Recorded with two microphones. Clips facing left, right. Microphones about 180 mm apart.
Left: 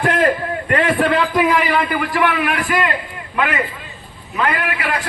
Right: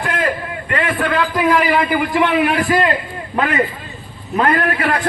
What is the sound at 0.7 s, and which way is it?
Speech, 45° left (ahead or behind).